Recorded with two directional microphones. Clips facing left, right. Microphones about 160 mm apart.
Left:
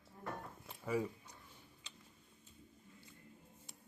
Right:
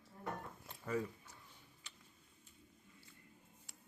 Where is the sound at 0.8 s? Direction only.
15° left (ahead or behind).